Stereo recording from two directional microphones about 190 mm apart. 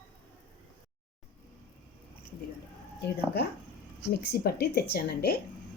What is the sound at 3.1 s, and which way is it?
A woman's voice, 60° left (ahead or behind).